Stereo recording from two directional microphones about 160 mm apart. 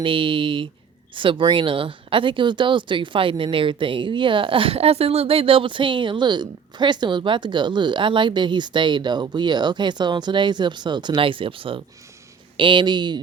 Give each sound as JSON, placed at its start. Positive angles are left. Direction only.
{"t": 0.0, "sound": "speech", "side_deg": -30}